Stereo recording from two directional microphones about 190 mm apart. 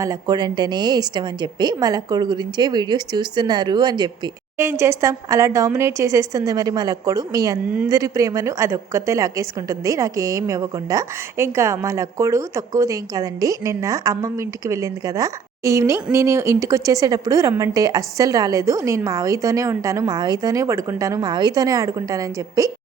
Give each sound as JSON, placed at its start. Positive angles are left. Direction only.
{"t": 0.0, "sound": "a woman's voice", "side_deg": -20}